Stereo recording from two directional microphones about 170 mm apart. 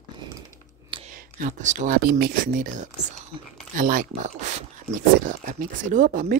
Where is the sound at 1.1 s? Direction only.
50° right (ahead or behind).